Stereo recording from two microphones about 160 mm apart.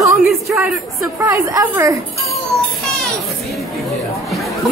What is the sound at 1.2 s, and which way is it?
Speech, 20° right (ahead or behind).